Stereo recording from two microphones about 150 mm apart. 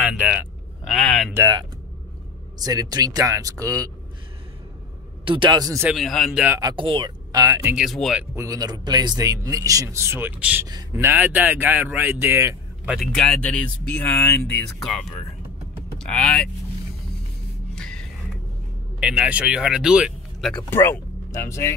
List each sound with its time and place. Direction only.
0.0 s a sound: 5° right (ahead or behind)
0.8 s speech: 5° left (ahead or behind)
1.3 s speech: 25° right (ahead or behind)
5.2 s speech: 35° right (ahead or behind)
5.9 s speech: centre (ahead or behind)
6.6 s speech: 35° right (ahead or behind)
7.7 s speech: centre (ahead or behind)
8.4 s speech: 25° right (ahead or behind)
12.9 s speech: centre (ahead or behind)
16.0 s speech: 5° left (ahead or behind)
17.7 s music: 5° left (ahead or behind)
18.9 s speech: 5° right (ahead or behind)
20.7 s speech: 15° left (ahead or behind)